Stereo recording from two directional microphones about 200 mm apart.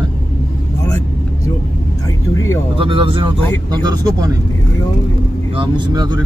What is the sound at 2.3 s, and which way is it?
Speech, 15° left (ahead or behind).